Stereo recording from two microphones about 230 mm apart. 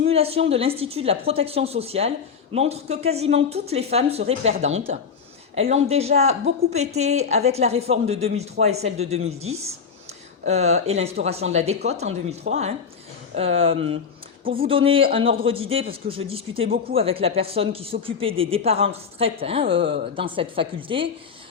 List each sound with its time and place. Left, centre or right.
0.1 s a woman's voice: right